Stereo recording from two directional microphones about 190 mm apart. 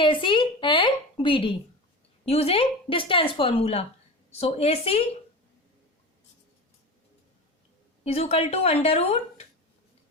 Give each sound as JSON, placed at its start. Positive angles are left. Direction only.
{"t": 0.0, "sound": "a sound", "side_deg": 25}
{"t": 2.2, "sound": "a woman's voice", "side_deg": 30}
{"t": 8.0, "sound": "a woman's voice", "side_deg": 35}